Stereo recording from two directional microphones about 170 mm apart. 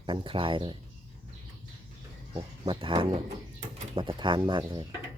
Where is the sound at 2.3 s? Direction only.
30° right (ahead or behind).